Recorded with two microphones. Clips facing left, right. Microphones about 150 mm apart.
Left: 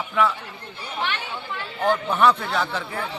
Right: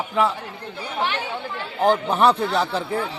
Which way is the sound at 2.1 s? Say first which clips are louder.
Right 2 dB; 35° right (ahead or behind).